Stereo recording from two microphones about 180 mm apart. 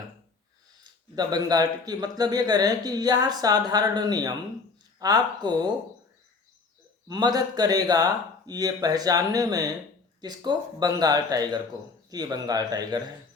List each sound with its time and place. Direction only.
0.9 s speech: 25° right (ahead or behind)
7.1 s speech: 20° right (ahead or behind)